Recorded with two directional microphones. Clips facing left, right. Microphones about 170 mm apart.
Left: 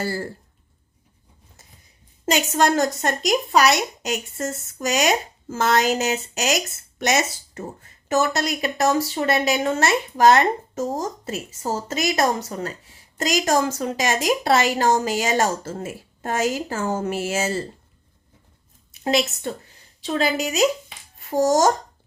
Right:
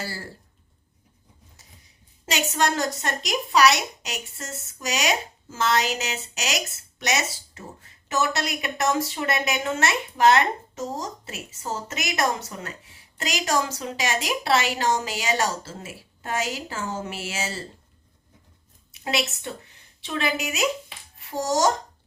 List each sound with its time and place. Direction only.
0.0 s a woman's voice: 50° left (ahead or behind)
2.2 s a woman's voice: 50° left (ahead or behind)
19.0 s a woman's voice: 40° left (ahead or behind)